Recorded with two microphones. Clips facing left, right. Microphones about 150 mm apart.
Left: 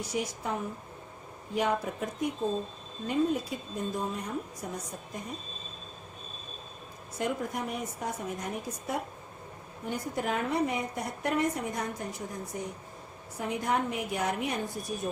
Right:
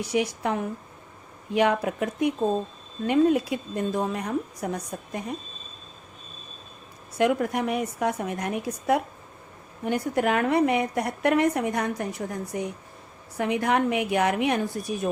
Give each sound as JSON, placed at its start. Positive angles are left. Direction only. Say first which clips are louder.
{"t": 0.0, "sound": "a woman's voice", "louder": "right 7 dB", "side_deg": -75}
{"t": 7.2, "sound": "a woman's voice", "louder": "right 9 dB", "side_deg": -75}